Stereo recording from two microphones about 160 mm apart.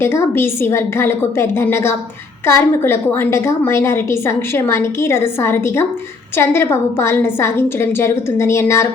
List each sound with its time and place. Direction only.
0.0 s a woman's voice: 15° left (ahead or behind)